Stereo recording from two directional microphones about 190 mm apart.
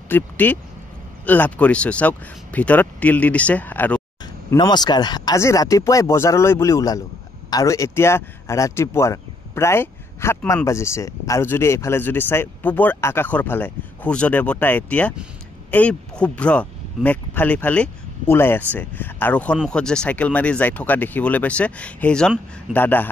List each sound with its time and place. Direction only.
0.1 s speech: 10° left (ahead or behind)
4.5 s speech: 20° left (ahead or behind)